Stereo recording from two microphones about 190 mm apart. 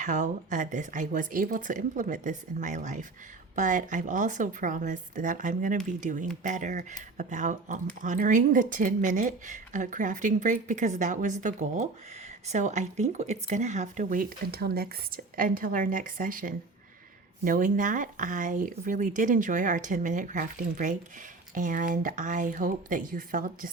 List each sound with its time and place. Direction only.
0.0 s a woman's voice: 40° right (ahead or behind)